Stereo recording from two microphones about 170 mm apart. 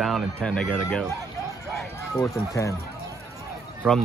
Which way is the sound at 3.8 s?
10° right (ahead or behind).